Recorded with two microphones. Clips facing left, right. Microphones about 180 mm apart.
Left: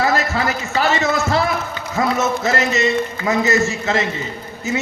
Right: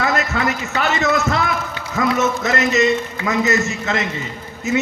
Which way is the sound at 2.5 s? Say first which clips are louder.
Right 3 dB; 30° left (ahead or behind).